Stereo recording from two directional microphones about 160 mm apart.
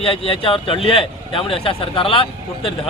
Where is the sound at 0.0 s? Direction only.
35° left (ahead or behind).